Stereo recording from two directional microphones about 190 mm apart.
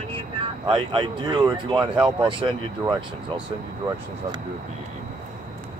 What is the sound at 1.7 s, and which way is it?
Speech, 5° right (ahead or behind).